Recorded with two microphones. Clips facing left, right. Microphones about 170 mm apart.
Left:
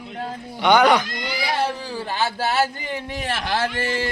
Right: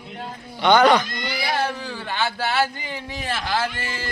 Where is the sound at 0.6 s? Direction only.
10° left (ahead or behind).